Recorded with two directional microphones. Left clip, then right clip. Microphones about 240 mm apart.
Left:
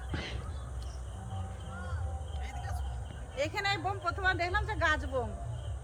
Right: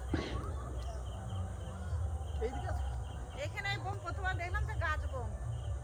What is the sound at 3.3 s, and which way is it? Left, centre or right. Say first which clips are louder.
Speech: left 7 dB; left.